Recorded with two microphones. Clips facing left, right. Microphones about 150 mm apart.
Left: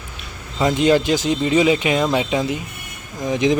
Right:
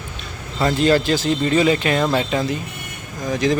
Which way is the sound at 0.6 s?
15° left (ahead or behind).